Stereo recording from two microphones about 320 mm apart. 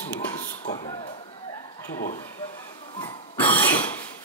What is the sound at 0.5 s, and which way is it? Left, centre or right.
Speech, centre.